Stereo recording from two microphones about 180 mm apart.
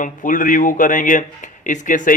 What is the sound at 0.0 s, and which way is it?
A man's voice, 45° left (ahead or behind).